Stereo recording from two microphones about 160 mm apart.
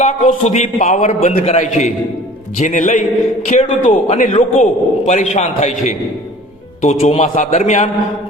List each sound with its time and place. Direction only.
0.0 s a man's voice: 45° left (ahead or behind)
6.8 s a man's voice: 45° left (ahead or behind)